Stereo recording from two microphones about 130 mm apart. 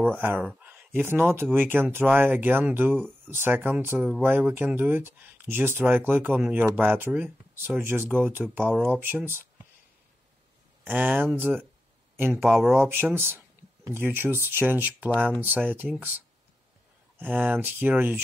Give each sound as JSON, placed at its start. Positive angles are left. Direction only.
{"t": 0.4, "sound": "speech", "side_deg": -10}
{"t": 10.8, "sound": "speech", "side_deg": -10}
{"t": 12.6, "sound": "speech", "side_deg": 0}
{"t": 12.9, "sound": "speech", "side_deg": -15}